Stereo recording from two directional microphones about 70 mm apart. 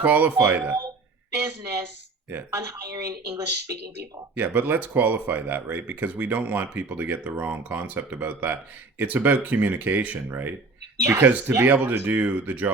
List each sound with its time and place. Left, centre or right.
0.0 s speech: right
2.3 s speech: right
2.9 s speech: right
4.4 s speech: right